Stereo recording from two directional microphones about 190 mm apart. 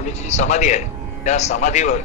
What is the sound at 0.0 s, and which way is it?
A man's voice, 35° left (ahead or behind).